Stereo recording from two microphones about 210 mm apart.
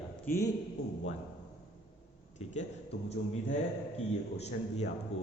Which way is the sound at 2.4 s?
35° left (ahead or behind).